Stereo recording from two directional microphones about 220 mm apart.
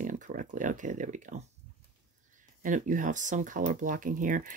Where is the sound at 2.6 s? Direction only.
35° right (ahead or behind).